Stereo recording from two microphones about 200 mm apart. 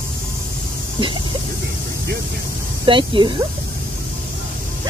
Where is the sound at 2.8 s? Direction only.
25° right (ahead or behind).